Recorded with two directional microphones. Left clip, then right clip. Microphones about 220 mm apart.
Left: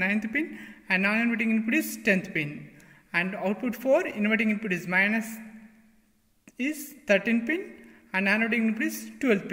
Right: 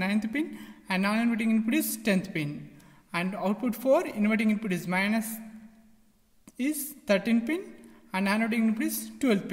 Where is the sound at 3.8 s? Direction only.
45° right (ahead or behind).